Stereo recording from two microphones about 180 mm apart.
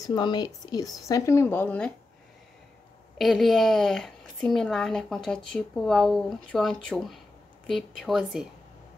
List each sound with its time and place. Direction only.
0.0 s a woman's voice: 25° left (ahead or behind)
3.2 s a woman's voice: centre (ahead or behind)